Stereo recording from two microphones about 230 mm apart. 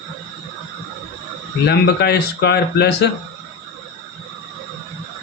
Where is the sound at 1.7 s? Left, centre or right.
Left.